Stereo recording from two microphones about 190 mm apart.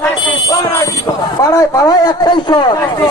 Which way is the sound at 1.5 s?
20° left (ahead or behind).